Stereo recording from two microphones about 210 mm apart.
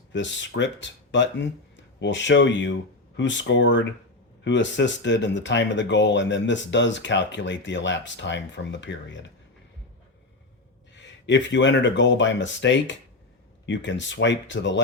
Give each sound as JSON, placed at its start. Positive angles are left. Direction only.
{"t": 0.1, "sound": "speech", "side_deg": 60}
{"t": 10.9, "sound": "speech", "side_deg": 60}